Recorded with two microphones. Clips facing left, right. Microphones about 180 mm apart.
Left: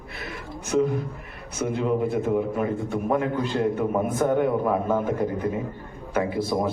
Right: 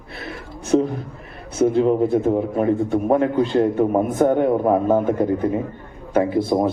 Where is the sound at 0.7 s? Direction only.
35° right (ahead or behind).